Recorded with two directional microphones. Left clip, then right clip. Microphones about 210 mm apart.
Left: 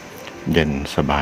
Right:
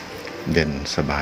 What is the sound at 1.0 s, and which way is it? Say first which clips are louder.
Speech: left 4 dB; 15° left (ahead or behind).